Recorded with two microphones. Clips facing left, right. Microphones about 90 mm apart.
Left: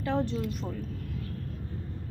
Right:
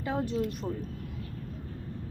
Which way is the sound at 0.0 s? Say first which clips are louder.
Left 2 dB; 10° right (ahead or behind).